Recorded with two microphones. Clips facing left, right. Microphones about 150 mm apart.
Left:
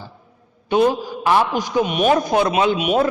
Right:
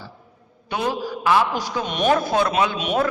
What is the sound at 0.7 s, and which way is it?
A man's voice, 20° left (ahead or behind).